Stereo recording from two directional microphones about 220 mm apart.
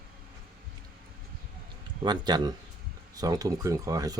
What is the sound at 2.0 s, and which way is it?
Speech, 20° right (ahead or behind).